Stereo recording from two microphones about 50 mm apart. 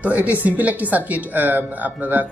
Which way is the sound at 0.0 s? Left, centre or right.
Right.